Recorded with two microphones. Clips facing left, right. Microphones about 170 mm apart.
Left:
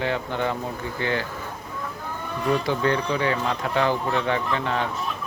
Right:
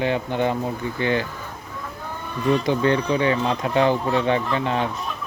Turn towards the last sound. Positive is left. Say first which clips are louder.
# right 2 dB
turn(degrees=-20)  # may be behind; listen again after turning